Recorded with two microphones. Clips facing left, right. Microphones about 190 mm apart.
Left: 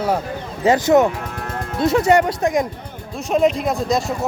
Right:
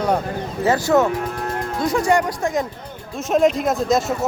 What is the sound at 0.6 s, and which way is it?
Speech, 20° left (ahead or behind).